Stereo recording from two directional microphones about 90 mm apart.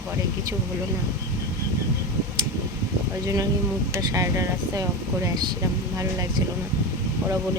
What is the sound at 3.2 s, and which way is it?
Speech, 40° right (ahead or behind).